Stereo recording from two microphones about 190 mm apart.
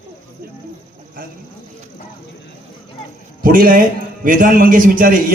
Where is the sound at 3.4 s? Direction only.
45° right (ahead or behind).